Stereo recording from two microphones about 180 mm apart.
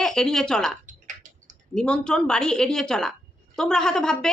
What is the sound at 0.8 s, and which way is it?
Typing, 45° right (ahead or behind).